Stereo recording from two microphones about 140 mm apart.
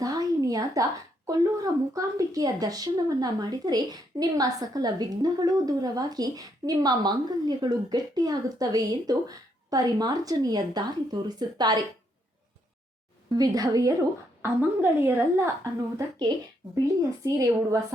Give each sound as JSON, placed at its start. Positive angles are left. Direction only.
{"t": 0.0, "sound": "a sound", "side_deg": -25}
{"t": 1.3, "sound": "speech", "side_deg": -25}
{"t": 13.3, "sound": "speech", "side_deg": -25}
{"t": 14.4, "sound": "speech", "side_deg": -15}